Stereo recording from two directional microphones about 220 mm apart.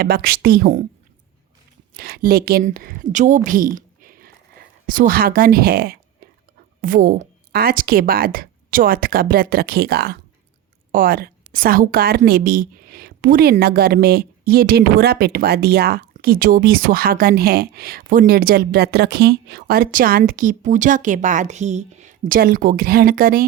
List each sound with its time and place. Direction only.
0.0 s a woman's voice: 45° right (ahead or behind)
1.9 s a woman's voice: 45° right (ahead or behind)